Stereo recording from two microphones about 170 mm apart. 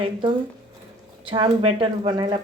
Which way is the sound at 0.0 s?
30° right (ahead or behind).